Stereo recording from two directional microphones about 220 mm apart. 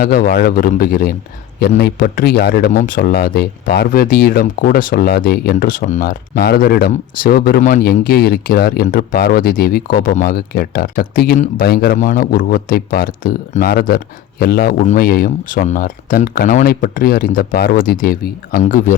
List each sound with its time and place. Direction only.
0.0 s speech: 40° left (ahead or behind)